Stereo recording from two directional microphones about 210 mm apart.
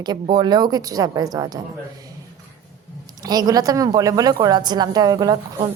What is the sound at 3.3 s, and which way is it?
A woman's voice, 20° right (ahead or behind).